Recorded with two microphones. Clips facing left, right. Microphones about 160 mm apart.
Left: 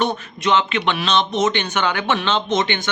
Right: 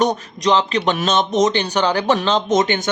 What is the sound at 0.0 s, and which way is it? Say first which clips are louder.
Speech: right 3 dB; 40° right (ahead or behind).